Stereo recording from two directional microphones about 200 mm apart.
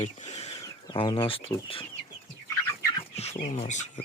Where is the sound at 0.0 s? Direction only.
35° left (ahead or behind).